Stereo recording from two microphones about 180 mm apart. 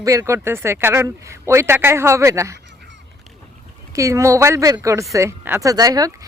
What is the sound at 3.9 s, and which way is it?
A woman's voice, 15° right (ahead or behind).